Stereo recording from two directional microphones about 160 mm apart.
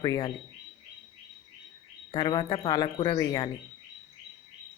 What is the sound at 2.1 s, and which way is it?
Speech, 25° left (ahead or behind).